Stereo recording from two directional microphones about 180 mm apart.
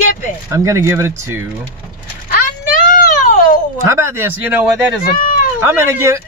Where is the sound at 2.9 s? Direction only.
50° left (ahead or behind).